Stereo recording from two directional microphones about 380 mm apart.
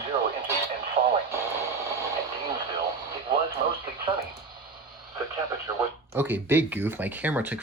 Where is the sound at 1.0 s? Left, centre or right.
Centre.